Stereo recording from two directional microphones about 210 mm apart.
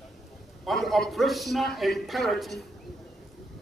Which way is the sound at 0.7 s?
Centre (ahead or behind).